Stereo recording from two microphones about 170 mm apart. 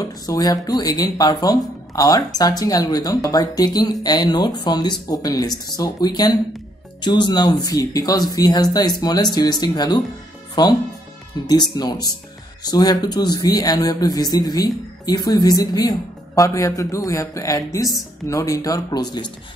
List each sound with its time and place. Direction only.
0.0 s speech: 20° left (ahead or behind)